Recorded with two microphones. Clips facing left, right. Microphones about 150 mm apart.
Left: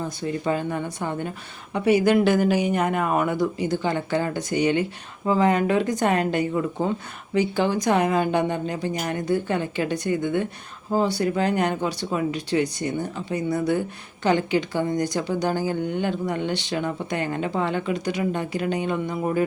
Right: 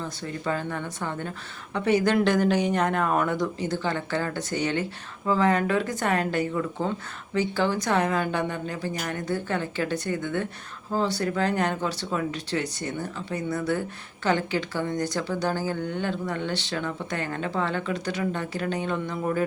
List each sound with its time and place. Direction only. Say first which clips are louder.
0.0 s speech: left 5 dB; 15° left (ahead or behind)